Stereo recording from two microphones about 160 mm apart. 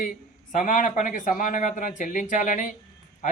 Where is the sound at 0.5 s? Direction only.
55° left (ahead or behind).